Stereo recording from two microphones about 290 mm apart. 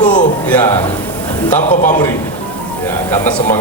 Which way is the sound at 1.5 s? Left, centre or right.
Left.